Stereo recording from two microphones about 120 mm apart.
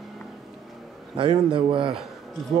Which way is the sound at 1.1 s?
45° right (ahead or behind).